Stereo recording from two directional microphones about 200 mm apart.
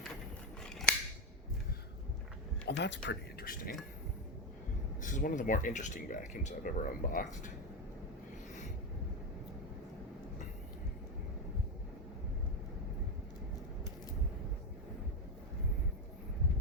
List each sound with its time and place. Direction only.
2.6 s speech: 60° left (ahead or behind)
3.4 s speech: 45° left (ahead or behind)
5.0 s speech: 40° left (ahead or behind)